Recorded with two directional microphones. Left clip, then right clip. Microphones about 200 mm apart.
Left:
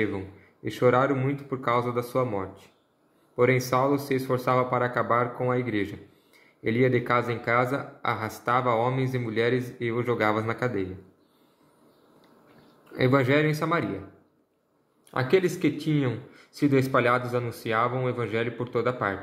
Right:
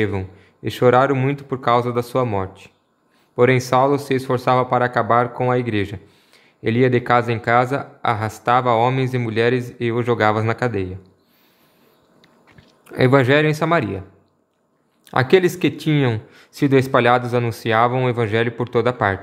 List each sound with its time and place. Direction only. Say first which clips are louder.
0.7 s speech: right 7 dB; 30° right (ahead or behind)
12.9 s speech: right 8 dB; 35° right (ahead or behind)
15.0 s speech: right 8 dB; 40° right (ahead or behind)